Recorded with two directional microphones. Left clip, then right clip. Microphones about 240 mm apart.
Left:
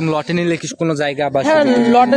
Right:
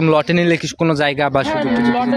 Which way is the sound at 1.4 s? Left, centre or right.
Left.